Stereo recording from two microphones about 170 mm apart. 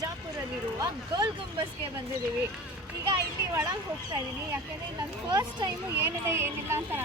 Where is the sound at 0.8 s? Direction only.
25° right (ahead or behind).